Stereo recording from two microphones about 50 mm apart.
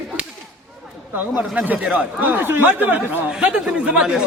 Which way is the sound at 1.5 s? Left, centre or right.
Right.